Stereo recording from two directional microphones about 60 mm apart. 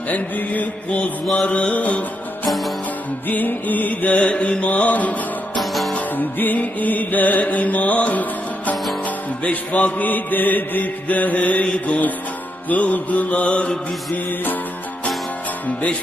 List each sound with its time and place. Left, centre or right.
0.1 s mantra: left
3.3 s music: left
4.2 s mantra: centre
5.6 s music: centre
5.9 s music: left
9.4 s mantra: left
11.6 s mantra: centre
12.6 s mantra: left
14.1 s mantra: left